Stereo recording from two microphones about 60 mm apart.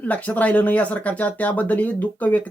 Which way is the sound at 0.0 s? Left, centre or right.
Left.